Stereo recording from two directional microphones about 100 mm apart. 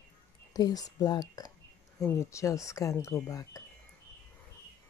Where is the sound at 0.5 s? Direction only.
40° left (ahead or behind).